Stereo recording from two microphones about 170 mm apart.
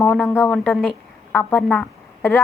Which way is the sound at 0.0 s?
10° left (ahead or behind).